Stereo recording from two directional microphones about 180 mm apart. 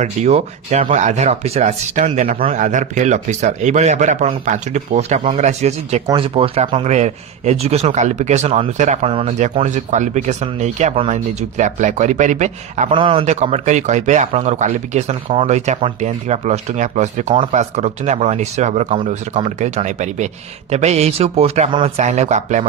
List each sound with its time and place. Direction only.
0.0 s speech: 40° right (ahead or behind)